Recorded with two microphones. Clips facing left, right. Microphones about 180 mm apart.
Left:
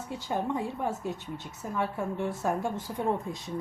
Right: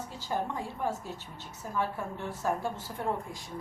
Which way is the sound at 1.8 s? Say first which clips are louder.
Left 4 dB; 20° left (ahead or behind).